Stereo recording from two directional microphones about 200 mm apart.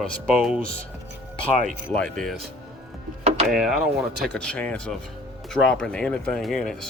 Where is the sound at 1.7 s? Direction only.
5° left (ahead or behind).